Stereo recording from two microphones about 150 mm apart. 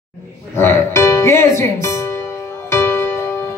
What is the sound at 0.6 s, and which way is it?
Speech, 15° left (ahead or behind).